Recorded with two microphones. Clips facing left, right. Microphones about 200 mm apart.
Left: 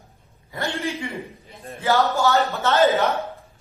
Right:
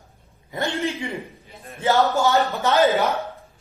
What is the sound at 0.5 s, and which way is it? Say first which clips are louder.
Speech: right 2 dB; 15° right (ahead or behind).